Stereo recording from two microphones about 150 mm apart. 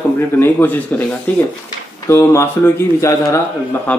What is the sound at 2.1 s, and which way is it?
Speech, 20° left (ahead or behind).